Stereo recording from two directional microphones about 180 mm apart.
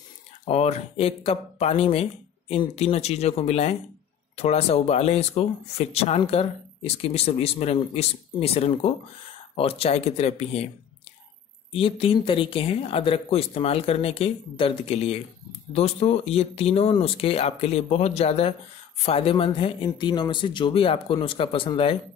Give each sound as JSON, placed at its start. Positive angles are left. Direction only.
{"t": 0.5, "sound": "speech", "side_deg": 35}
{"t": 11.7, "sound": "speech", "side_deg": 30}